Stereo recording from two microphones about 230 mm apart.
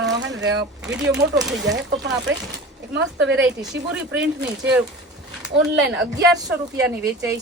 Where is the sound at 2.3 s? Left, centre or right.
Right.